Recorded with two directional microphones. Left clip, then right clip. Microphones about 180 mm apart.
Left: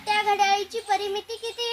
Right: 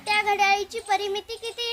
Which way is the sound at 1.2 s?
40° right (ahead or behind).